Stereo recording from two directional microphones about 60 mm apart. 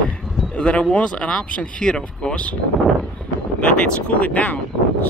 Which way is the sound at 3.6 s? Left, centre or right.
Left.